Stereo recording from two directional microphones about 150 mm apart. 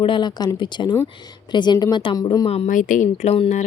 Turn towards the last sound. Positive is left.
turn(degrees=45)  # may be behind; listen again after turning